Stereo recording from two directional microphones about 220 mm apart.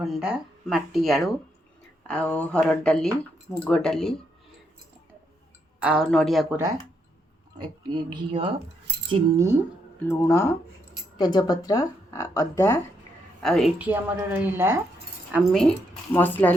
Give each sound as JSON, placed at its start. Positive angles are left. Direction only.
{"t": 0.0, "sound": "speech", "side_deg": 0}
{"t": 5.8, "sound": "speech", "side_deg": -5}
{"t": 8.1, "sound": "a woman's voice", "side_deg": -20}
{"t": 10.1, "sound": "speech", "side_deg": 15}
{"t": 13.4, "sound": "a woman's voice", "side_deg": 0}